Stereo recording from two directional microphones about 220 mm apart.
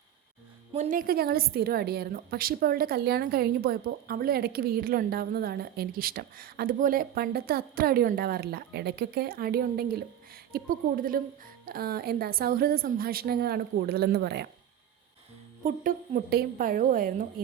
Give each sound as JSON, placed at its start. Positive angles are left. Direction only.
{"t": 0.7, "sound": "a woman's voice", "side_deg": -35}
{"t": 15.6, "sound": "a woman's voice", "side_deg": -35}